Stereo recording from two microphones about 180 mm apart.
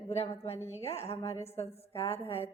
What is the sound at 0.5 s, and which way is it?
Speech, 15° left (ahead or behind).